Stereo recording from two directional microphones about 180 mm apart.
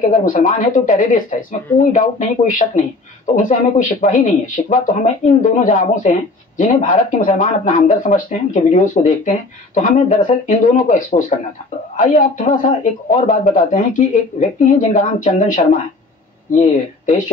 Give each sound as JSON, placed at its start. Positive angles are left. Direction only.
{"t": 0.0, "sound": "speech", "side_deg": 45}